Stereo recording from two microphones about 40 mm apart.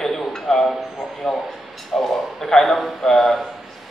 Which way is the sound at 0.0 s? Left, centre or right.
Centre.